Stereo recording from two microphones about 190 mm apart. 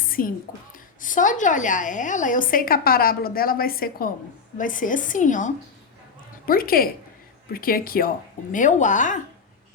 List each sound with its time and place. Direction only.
0.2 s a woman's voice: 45° left (ahead or behind)